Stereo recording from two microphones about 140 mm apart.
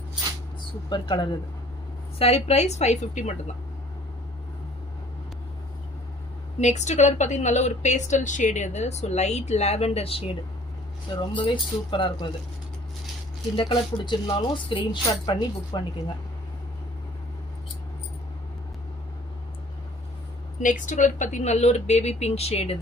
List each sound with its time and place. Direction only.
0.9 s speech: 35° left (ahead or behind)
2.1 s speech: 45° left (ahead or behind)
6.6 s a woman's voice: 55° left (ahead or behind)
11.3 s speech: 35° left (ahead or behind)
13.6 s speech: 35° left (ahead or behind)
20.6 s speech: 65° left (ahead or behind); by 22.8 s 50° left (ahead or behind)